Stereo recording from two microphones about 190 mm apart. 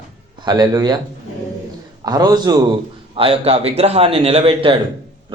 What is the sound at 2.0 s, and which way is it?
A man's voice, 20° right (ahead or behind).